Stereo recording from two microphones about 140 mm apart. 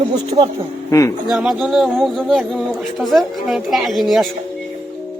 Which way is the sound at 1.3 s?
Centre (ahead or behind).